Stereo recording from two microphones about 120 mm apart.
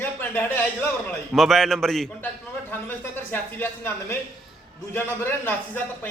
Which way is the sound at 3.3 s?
15° left (ahead or behind).